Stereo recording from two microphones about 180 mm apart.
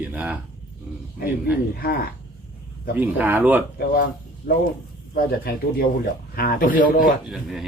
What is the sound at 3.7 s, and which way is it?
A man's voice, 55° left (ahead or behind).